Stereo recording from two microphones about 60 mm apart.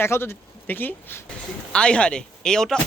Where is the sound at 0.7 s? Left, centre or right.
Left.